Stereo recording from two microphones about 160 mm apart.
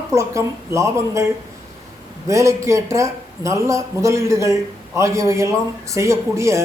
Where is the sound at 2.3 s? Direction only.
20° right (ahead or behind).